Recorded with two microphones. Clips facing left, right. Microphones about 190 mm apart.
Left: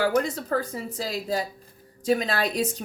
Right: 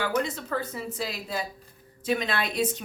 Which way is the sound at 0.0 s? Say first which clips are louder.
Left 4 dB; 40° left (ahead or behind).